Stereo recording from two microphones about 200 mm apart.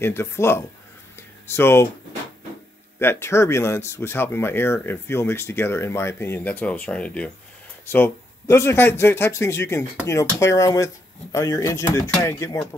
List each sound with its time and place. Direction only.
0.0 s speech: 10° left (ahead or behind)
1.1 s a sound: 10° left (ahead or behind)
3.0 s speech: 10° left (ahead or behind)